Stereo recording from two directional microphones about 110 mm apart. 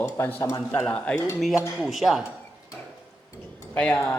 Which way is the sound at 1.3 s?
Centre (ahead or behind).